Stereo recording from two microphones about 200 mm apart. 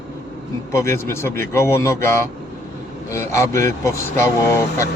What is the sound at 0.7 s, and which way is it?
Speech, 15° left (ahead or behind).